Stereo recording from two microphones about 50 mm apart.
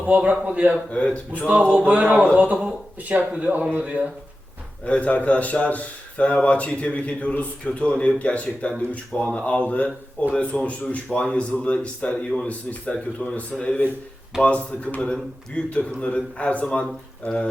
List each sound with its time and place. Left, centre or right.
0.0 s speech: right
0.9 s a man's voice: left
1.7 s speech: right
2.6 s speech: right
4.9 s a man's voice: left